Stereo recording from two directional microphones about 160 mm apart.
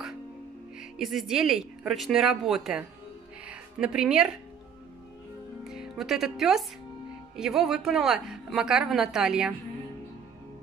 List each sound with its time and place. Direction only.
0.7 s speech: centre (ahead or behind)
3.4 s a sound: 5° right (ahead or behind)
5.6 s speech: 5° right (ahead or behind)